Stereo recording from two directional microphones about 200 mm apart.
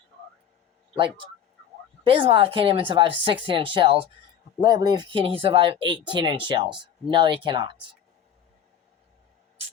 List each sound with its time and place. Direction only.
2.0 s speech: 25° right (ahead or behind)